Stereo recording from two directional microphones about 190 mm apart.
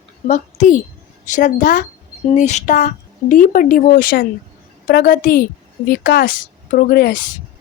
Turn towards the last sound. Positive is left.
turn(degrees=55)  # may be behind; listen again after turning